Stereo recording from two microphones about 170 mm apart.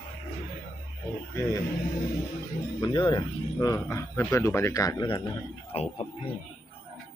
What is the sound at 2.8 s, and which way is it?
Speech, 30° left (ahead or behind).